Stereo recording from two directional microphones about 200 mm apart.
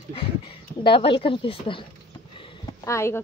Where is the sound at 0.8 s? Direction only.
25° left (ahead or behind).